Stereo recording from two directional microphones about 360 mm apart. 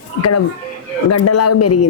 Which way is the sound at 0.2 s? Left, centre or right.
Left.